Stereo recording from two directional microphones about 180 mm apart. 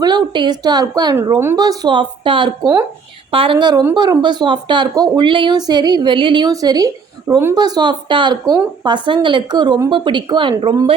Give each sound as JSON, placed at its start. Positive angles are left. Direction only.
{"t": 0.0, "sound": "speech", "side_deg": -25}